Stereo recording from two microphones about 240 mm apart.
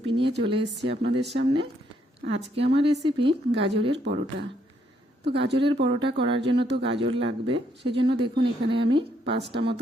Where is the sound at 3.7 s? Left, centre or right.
Right.